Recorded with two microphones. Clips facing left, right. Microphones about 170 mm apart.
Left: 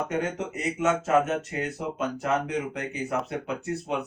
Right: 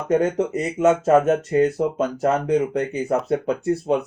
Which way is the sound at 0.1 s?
35° right (ahead or behind).